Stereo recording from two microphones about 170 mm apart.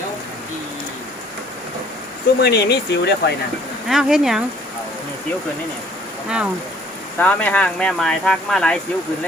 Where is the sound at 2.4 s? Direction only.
75° left (ahead or behind).